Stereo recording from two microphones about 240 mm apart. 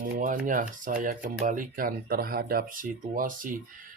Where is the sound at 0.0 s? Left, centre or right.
Right.